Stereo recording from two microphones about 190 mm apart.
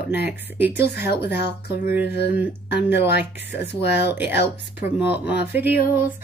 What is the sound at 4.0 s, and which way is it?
Speech, 10° right (ahead or behind).